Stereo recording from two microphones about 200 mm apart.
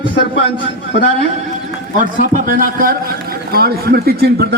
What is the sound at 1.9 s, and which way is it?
A man's voice, 45° right (ahead or behind).